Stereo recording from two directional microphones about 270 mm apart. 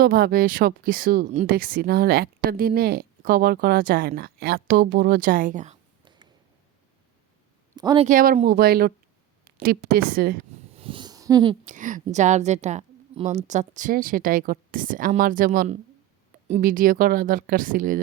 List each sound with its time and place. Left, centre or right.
0.0 s speech: right
7.8 s speech: centre
8.0 s a woman's voice: right
10.8 s a sound: centre
11.6 s a woman's voice: right